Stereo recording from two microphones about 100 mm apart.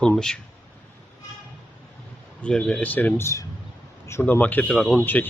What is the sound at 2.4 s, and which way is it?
Speech, 10° left (ahead or behind).